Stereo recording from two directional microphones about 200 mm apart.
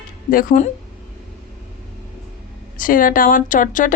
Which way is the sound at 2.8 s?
45° left (ahead or behind).